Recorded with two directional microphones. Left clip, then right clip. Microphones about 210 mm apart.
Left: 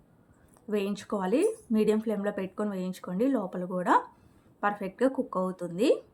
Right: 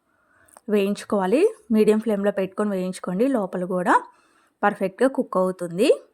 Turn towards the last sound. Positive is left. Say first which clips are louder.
# right 7 dB
turn(degrees=-40)  # may be behind; listen again after turning